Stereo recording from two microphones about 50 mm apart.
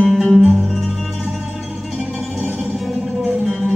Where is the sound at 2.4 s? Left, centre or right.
Centre.